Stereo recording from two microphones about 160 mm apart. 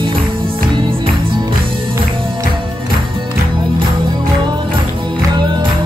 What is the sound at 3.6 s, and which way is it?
Music, 30° right (ahead or behind).